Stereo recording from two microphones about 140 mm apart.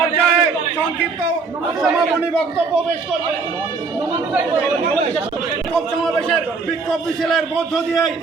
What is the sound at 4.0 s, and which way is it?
Chatter, 15° right (ahead or behind).